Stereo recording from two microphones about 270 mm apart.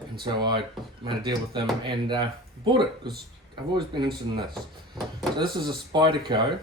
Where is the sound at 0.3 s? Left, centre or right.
Centre.